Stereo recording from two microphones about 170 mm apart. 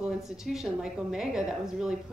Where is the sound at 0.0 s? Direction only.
5° right (ahead or behind).